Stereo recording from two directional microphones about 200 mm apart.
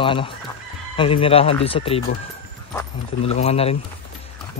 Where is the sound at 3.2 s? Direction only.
30° left (ahead or behind).